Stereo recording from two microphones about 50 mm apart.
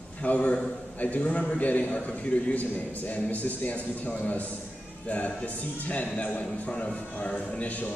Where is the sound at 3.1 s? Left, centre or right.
Left.